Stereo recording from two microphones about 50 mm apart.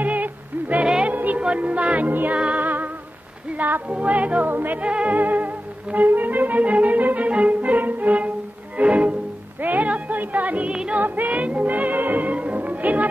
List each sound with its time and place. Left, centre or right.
0.0 s a sound: right
1.0 s music: right
4.8 s music: right
8.7 s bowed string instrument: right
9.6 s music: right
10.7 s music: centre
11.0 s music: right